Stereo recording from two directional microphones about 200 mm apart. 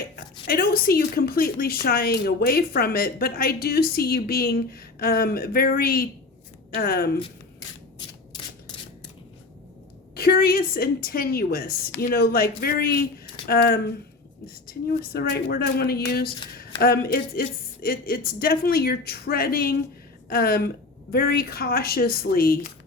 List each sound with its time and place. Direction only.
0.4 s speech: 50° left (ahead or behind)
10.2 s speech: 50° left (ahead or behind)
17.8 s speech: 45° left (ahead or behind)